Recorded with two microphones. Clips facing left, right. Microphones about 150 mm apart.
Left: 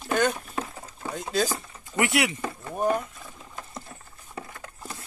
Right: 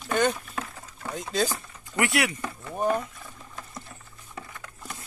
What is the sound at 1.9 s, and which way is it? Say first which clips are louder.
Speech: left 1 dB; 25° left (ahead or behind).